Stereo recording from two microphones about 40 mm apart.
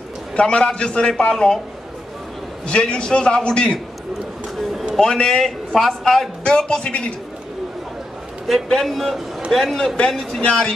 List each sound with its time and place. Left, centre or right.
0.4 s a man's voice: left
2.6 s a man's voice: left
4.9 s a man's voice: centre
6.4 s a man's voice: centre
6.9 s a man's voice: left
8.8 s a man's voice: centre
9.9 s a man's voice: centre